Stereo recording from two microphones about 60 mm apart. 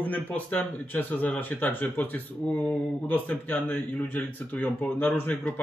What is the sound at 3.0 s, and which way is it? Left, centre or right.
Speech, left.